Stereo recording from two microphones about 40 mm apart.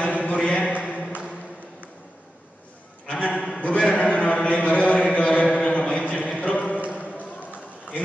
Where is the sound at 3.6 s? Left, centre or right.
Left.